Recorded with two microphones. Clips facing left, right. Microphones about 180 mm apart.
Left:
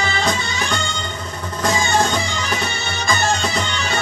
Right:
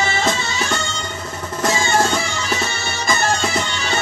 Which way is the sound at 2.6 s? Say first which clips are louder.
Even; 25° right (ahead or behind).